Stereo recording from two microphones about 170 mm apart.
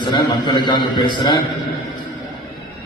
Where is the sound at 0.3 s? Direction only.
25° left (ahead or behind).